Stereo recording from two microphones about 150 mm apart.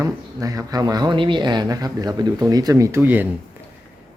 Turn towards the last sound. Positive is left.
turn(degrees=-10)  # may be behind; listen again after turning